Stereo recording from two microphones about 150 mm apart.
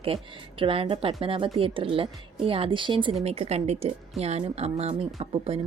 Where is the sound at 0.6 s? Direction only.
35° right (ahead or behind).